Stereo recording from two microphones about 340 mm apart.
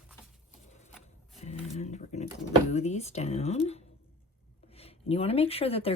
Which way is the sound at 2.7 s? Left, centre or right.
Centre.